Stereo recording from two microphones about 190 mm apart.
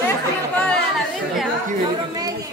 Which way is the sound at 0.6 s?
5° left (ahead or behind).